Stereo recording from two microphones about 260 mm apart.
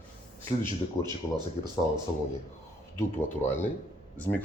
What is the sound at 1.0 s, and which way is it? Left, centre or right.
Speech, centre.